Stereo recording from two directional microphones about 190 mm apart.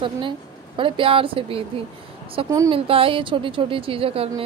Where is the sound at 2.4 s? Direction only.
15° right (ahead or behind).